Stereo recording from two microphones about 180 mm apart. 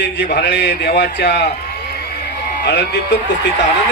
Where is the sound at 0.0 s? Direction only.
70° left (ahead or behind).